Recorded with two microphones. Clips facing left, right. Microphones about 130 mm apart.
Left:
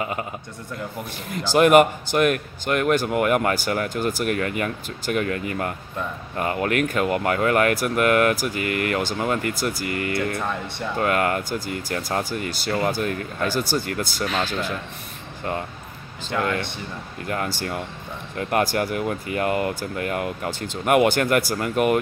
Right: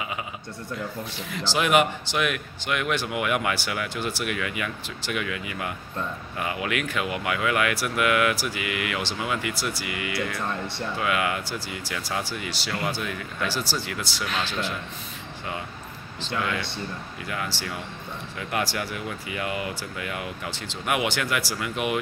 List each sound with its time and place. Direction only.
1.3 s speech: 50° left (ahead or behind)
16.3 s speech: 50° left (ahead or behind)